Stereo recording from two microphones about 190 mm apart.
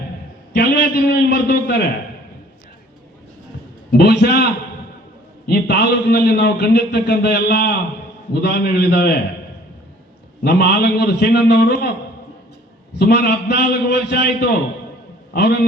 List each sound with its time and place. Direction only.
0.5 s a man's voice: 60° left (ahead or behind)
3.9 s a man's voice: 60° left (ahead or behind)
5.5 s a man's voice: 60° left (ahead or behind)
10.4 s a man's voice: 55° left (ahead or behind)
13.0 s a man's voice: 60° left (ahead or behind)